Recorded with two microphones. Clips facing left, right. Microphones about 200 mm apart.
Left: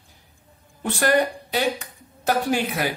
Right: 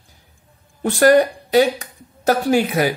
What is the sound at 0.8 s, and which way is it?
A woman's voice, 40° right (ahead or behind).